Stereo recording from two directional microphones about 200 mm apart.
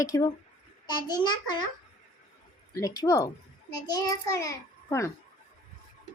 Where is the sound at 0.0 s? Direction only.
15° left (ahead or behind).